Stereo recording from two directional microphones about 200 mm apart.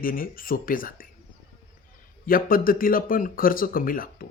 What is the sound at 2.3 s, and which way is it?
A man's voice, 45° left (ahead or behind).